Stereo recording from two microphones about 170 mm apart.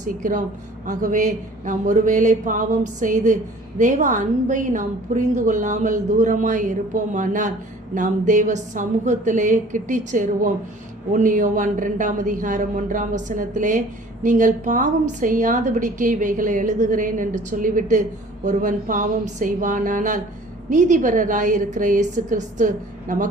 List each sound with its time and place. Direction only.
0.2 s a woman's voice: 50° right (ahead or behind)